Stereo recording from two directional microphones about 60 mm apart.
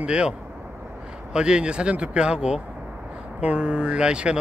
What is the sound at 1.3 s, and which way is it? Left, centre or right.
Speech, centre.